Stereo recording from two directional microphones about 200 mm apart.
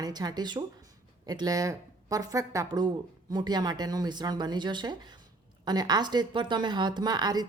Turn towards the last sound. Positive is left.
turn(degrees=-20)  # may be behind; listen again after turning